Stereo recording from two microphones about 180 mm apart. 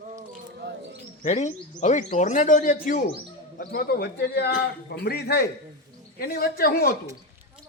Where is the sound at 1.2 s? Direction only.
40° left (ahead or behind); by 6.9 s 55° left (ahead or behind).